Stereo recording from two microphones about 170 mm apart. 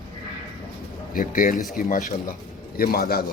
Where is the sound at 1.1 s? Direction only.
50° left (ahead or behind).